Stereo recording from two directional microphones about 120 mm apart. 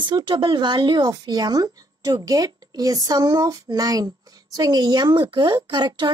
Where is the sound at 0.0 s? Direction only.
40° right (ahead or behind).